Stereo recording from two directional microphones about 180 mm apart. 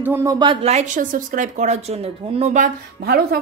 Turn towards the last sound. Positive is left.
turn(degrees=-55)  # may be behind; listen again after turning